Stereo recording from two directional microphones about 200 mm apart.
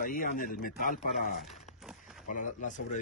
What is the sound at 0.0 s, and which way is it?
Speech, 45° left (ahead or behind).